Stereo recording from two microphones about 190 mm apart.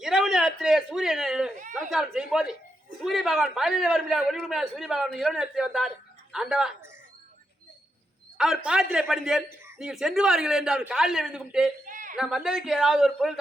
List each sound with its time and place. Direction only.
0.0 s a man's voice: centre (ahead or behind)
8.4 s a man's voice: 5° right (ahead or behind)
11.9 s a sound: 45° right (ahead or behind)
12.1 s a man's voice: 5° right (ahead or behind)